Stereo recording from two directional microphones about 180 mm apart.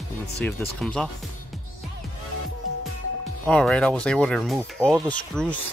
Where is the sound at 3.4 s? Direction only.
5° left (ahead or behind).